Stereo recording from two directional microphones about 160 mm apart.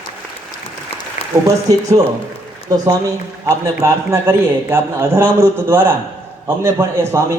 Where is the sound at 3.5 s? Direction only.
15° right (ahead or behind).